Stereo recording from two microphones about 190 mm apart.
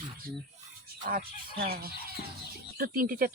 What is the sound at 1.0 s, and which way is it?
Speech, 50° right (ahead or behind).